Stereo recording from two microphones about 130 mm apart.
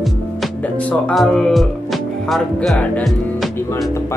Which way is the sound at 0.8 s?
5° left (ahead or behind).